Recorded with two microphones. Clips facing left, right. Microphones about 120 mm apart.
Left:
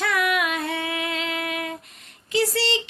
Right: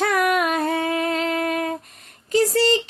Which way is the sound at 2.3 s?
45° right (ahead or behind).